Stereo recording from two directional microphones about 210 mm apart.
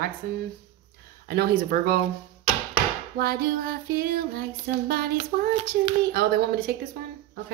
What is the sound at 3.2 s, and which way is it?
Speech, 45° right (ahead or behind).